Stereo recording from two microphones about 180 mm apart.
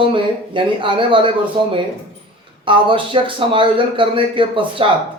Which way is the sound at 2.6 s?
30° right (ahead or behind).